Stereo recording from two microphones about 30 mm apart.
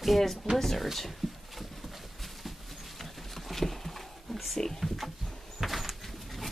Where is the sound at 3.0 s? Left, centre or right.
Centre.